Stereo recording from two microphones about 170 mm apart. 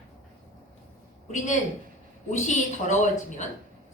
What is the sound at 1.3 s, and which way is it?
A woman's voice, 45° left (ahead or behind).